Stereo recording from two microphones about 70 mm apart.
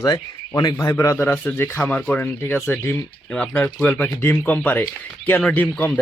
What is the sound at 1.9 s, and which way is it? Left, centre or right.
Speech, left.